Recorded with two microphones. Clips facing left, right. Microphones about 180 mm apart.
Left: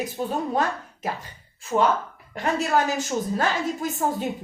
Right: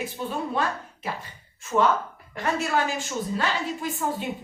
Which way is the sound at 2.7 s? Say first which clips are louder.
Left 3 dB; 40° left (ahead or behind).